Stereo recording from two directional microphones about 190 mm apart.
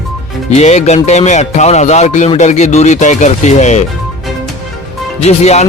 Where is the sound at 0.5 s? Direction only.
35° left (ahead or behind).